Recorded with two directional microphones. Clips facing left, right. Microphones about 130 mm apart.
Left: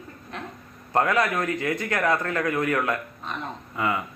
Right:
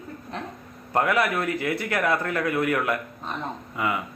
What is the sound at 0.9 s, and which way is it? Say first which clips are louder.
A man's voice: even; 15° right (ahead or behind).